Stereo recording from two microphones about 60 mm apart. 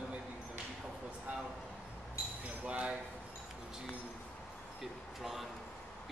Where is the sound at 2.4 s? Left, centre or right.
Centre.